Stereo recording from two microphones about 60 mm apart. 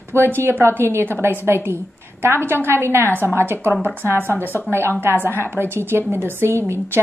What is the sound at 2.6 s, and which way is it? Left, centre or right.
A woman's voice, right.